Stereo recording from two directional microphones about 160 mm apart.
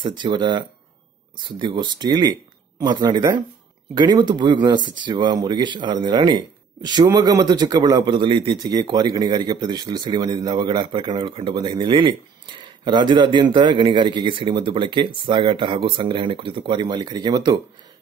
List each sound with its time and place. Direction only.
0.0 s a man's voice: 30° right (ahead or behind)